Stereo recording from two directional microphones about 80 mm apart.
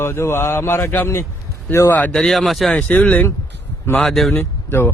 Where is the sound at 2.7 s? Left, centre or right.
Centre.